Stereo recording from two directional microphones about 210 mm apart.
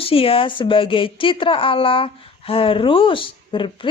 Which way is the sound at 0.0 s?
25° left (ahead or behind).